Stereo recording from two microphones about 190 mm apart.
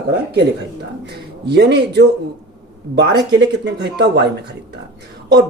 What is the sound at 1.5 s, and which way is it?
Speech, 60° right (ahead or behind).